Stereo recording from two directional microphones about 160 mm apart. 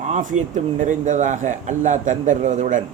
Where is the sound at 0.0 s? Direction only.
50° right (ahead or behind).